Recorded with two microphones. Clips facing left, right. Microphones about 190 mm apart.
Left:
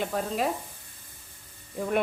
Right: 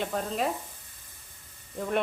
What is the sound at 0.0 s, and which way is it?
Speech, 5° left (ahead or behind).